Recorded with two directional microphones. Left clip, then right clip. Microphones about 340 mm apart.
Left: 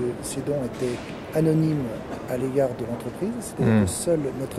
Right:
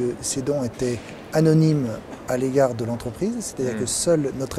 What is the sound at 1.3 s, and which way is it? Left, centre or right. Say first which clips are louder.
Speech: right 4 dB; right.